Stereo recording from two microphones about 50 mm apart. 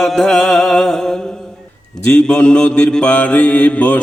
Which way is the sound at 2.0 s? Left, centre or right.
Left.